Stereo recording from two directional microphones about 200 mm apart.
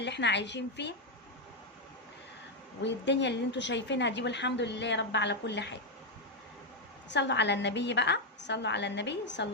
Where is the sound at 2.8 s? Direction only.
60° left (ahead or behind).